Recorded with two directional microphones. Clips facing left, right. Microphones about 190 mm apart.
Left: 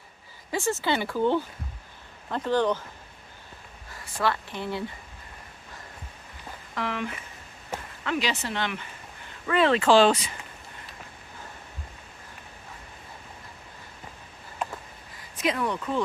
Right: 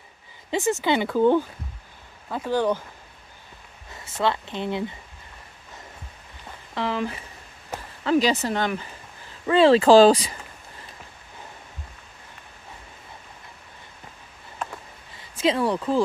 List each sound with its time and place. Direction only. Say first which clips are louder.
0.5 s speech: right 4 dB; 15° right (ahead or behind)
3.9 s speech: right 3 dB; 25° right (ahead or behind)
6.7 s speech: right 4 dB; 30° right (ahead or behind)
15.1 s speech: right 5 dB; 25° right (ahead or behind)